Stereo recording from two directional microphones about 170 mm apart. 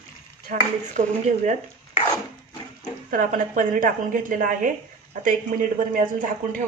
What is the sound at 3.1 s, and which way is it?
A woman's voice, 50° right (ahead or behind).